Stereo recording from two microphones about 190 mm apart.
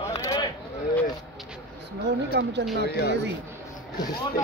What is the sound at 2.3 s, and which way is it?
Speech, 65° right (ahead or behind).